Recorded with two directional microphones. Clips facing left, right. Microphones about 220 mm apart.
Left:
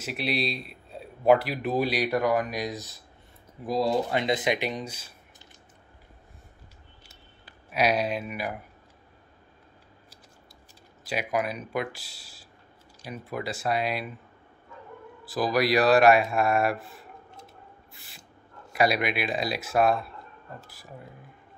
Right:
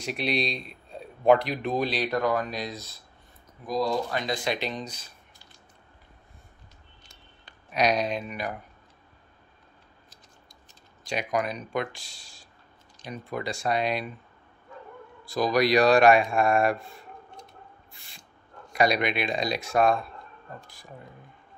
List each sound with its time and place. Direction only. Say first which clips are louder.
0.0 s a man's voice: right 1 dB; 5° left (ahead or behind)
3.6 s speech: left 2 dB; 25° left (ahead or behind); by 5.1 s 10° left (ahead or behind)
7.0 s a sound: left 2 dB; 5° left (ahead or behind)
11.1 s a man's voice: even; 5° left (ahead or behind)
15.2 s a man's voice: right 1 dB; 5° left (ahead or behind)
17.9 s spray: left 2 dB; 5° left (ahead or behind)
18.7 s a man's voice: right 1 dB; 5° left (ahead or behind)